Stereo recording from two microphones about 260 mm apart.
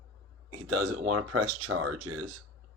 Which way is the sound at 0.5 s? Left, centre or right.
Right.